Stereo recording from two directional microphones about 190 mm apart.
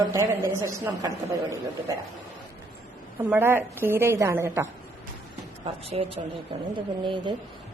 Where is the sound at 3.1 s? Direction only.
10° right (ahead or behind).